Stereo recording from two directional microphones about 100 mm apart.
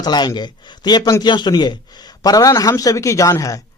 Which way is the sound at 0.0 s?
45° left (ahead or behind).